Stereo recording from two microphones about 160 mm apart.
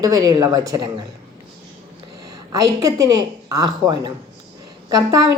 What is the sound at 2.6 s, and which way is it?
A woman's voice, 20° right (ahead or behind).